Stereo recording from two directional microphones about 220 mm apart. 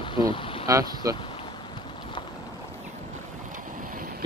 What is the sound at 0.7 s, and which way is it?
Speech, 15° right (ahead or behind).